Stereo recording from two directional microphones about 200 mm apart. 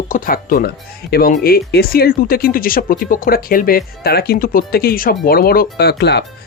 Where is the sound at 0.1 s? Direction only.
45° left (ahead or behind).